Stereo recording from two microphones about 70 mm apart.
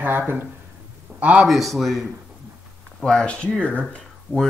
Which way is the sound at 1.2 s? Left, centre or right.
Centre.